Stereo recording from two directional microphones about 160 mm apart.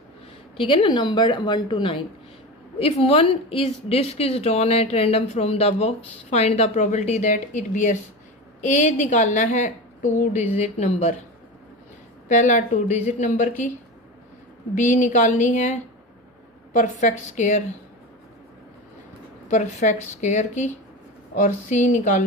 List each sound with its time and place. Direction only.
0.6 s a woman's voice: 30° left (ahead or behind)
12.3 s a woman's voice: 50° left (ahead or behind)
14.8 s a woman's voice: 50° left (ahead or behind)
16.7 s a woman's voice: 50° left (ahead or behind)
19.5 s a woman's voice: 50° left (ahead or behind)